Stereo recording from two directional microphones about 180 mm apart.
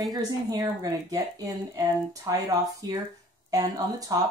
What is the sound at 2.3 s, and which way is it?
Speech, 20° right (ahead or behind).